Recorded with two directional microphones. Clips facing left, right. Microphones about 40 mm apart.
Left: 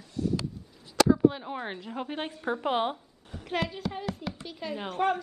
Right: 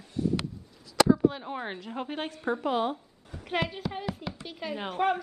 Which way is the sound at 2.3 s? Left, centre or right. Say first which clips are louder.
Right 2 dB; centre.